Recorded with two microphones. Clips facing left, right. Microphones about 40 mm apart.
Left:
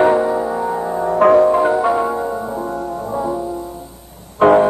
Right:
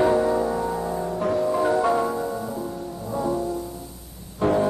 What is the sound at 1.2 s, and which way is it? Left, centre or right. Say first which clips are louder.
Music: left 14 dB; left.